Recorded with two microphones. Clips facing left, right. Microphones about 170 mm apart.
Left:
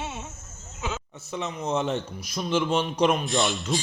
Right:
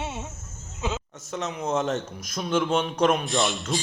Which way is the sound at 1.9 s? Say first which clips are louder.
Even; 45° right (ahead or behind).